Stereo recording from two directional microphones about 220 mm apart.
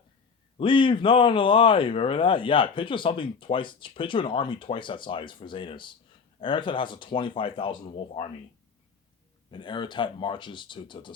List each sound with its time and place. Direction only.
0.5 s speech: 25° left (ahead or behind)
9.5 s speech: 20° left (ahead or behind)